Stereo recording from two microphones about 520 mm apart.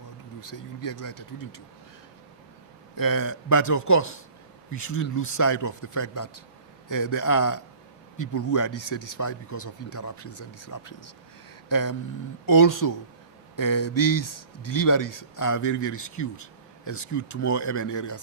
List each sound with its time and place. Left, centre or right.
0.5 s speech: left
2.9 s speech: left